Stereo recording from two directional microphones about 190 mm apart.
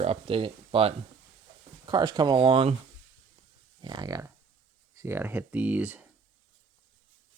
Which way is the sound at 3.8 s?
20° right (ahead or behind).